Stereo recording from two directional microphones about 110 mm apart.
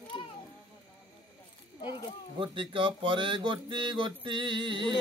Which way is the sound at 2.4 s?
50° right (ahead or behind).